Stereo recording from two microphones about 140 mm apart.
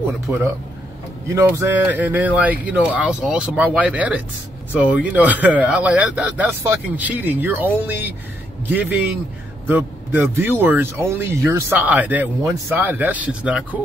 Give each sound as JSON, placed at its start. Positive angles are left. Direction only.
{"t": 0.3, "sound": "speech", "side_deg": -10}